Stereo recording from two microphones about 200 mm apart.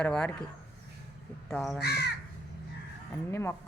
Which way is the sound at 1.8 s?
55° left (ahead or behind).